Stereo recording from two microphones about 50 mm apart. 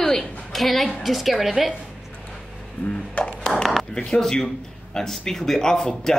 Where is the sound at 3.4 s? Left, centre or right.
Centre.